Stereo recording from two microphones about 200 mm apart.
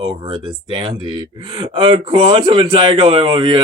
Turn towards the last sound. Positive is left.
turn(degrees=-25)  # may be behind; listen again after turning